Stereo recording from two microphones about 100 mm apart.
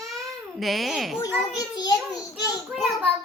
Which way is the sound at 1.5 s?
40° left (ahead or behind).